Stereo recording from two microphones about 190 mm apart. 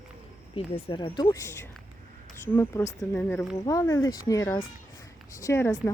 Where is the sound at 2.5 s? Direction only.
10° left (ahead or behind).